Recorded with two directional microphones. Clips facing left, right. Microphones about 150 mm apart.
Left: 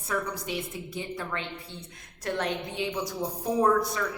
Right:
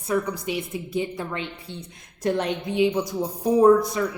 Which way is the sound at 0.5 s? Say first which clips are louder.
Right 6 dB; 15° right (ahead or behind).